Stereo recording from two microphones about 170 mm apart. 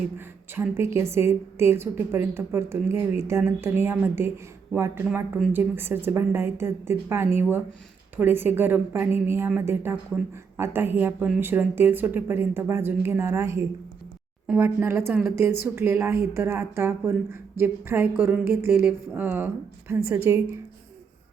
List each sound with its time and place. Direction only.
0.5 s a woman's voice: 15° right (ahead or behind)